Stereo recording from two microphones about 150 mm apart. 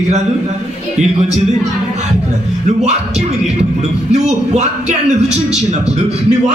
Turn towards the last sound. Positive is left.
turn(degrees=-50)  # may be behind; listen again after turning